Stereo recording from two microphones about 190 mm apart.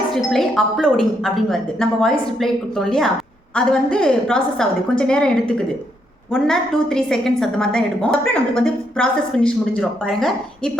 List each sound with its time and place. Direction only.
0.1 s a woman's voice: centre (ahead or behind)